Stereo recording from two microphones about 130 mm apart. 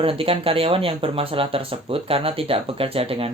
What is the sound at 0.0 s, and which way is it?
Speech, 45° right (ahead or behind).